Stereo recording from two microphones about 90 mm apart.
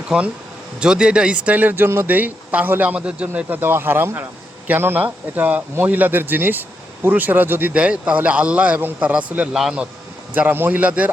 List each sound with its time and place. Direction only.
0.8 s speech: 10° right (ahead or behind)
10.3 s a man's voice: 20° right (ahead or behind)